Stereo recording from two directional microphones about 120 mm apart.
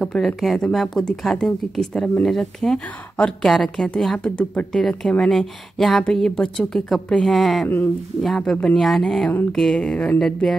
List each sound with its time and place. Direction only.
0.0 s a woman's voice: centre (ahead or behind)
7.6 s speech: 15° left (ahead or behind)
8.2 s a woman's voice: 5° left (ahead or behind)